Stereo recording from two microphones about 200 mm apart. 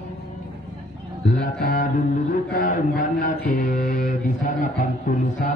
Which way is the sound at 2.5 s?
40° left (ahead or behind).